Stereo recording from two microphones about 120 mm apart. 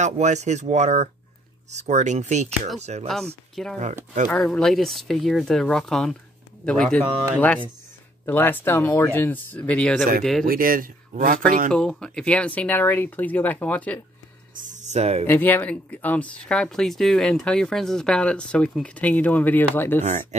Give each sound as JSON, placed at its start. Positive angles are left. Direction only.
{"t": 0.0, "sound": "speech", "side_deg": -75}
{"t": 3.8, "sound": "speech", "side_deg": -90}
{"t": 4.3, "sound": "speech", "side_deg": 5}
{"t": 11.2, "sound": "speech", "side_deg": -90}
{"t": 11.7, "sound": "speech", "side_deg": 5}
{"t": 14.6, "sound": "speech", "side_deg": -75}
{"t": 15.2, "sound": "speech", "side_deg": 15}
{"t": 20.1, "sound": "speech", "side_deg": -80}